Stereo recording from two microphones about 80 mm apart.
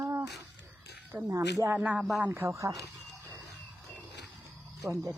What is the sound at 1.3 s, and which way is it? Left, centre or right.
Speech, right.